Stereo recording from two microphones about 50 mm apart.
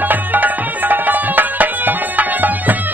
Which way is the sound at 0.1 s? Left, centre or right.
Right.